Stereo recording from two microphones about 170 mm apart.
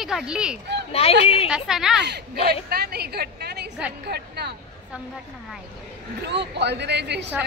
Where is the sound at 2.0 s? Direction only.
80° right.